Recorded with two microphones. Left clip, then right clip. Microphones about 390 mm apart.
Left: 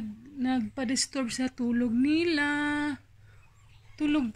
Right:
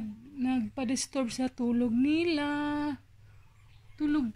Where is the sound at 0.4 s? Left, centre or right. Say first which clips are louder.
Left 2 dB; centre.